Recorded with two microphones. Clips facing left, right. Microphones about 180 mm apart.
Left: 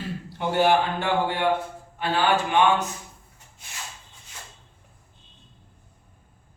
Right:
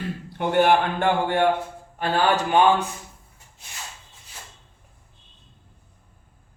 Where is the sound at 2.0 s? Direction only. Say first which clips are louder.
Right 1 dB; 40° right (ahead or behind).